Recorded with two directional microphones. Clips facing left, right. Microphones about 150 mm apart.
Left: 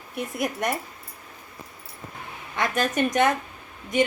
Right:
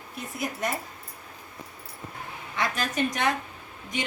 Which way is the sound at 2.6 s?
50° left (ahead or behind).